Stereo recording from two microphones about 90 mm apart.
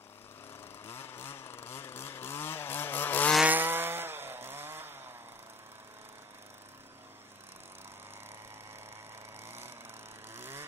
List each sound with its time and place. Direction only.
0.8 s chainsaw: 25° left (ahead or behind)
3.4 s chainsaw: 20° right (ahead or behind)
9.4 s a sound: 25° right (ahead or behind)
10.3 s vehicle: 25° right (ahead or behind)